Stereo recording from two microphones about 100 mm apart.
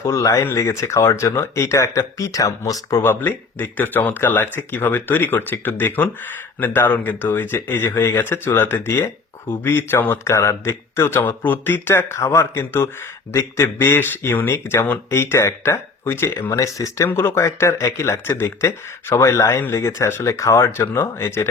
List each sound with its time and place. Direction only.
0.0 s speech: 30° left (ahead or behind)
3.0 s speech: 20° left (ahead or behind)